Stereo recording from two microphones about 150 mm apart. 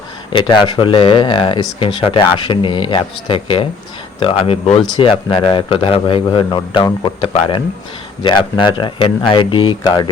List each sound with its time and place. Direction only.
0.3 s speech: 30° left (ahead or behind)